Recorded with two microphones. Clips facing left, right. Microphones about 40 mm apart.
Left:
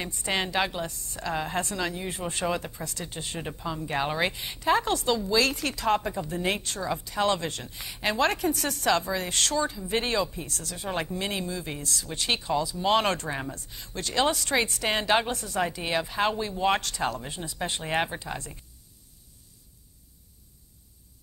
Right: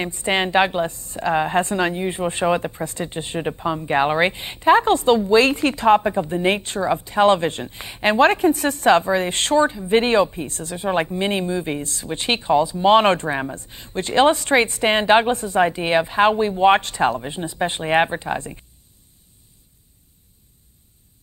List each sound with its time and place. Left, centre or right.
0.0 s a woman's voice: right